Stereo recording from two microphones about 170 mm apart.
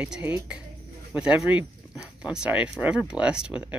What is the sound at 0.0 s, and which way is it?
Speech, 10° right (ahead or behind).